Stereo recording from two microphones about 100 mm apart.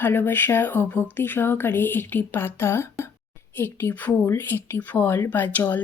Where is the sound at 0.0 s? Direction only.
20° left (ahead or behind).